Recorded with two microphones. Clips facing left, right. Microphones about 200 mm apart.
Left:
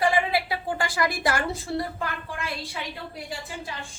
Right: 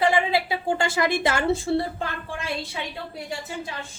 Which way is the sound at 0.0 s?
25° right (ahead or behind).